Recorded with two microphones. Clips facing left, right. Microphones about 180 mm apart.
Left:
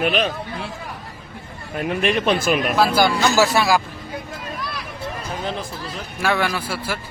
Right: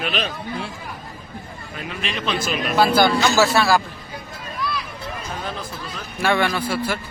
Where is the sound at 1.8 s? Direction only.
55° left (ahead or behind).